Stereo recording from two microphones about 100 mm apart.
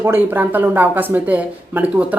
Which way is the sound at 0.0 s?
20° right (ahead or behind).